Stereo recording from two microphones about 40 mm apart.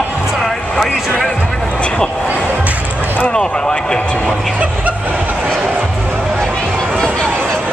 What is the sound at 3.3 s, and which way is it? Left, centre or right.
Speech, left.